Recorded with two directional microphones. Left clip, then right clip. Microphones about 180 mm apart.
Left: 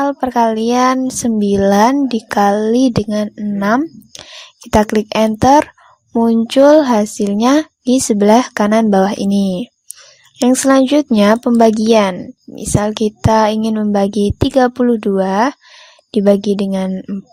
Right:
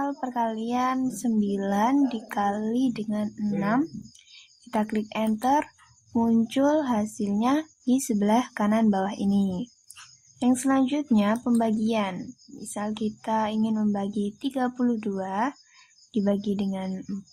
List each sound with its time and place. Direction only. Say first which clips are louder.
0.0 s speech: left 14 dB; 45° left (ahead or behind)